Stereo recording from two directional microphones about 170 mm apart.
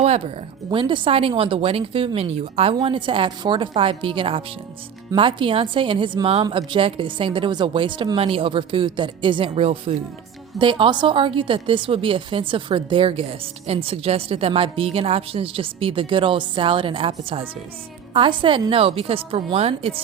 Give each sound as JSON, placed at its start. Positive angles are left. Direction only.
{"t": 0.7, "sound": "a woman's voice", "side_deg": -30}